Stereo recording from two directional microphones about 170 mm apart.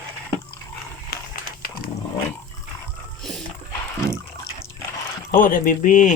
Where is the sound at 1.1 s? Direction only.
60° left (ahead or behind).